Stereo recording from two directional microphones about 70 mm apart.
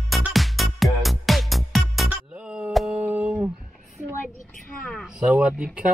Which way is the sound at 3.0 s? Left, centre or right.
Right.